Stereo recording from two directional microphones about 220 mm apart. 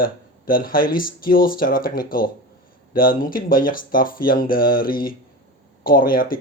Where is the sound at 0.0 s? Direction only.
40° left (ahead or behind).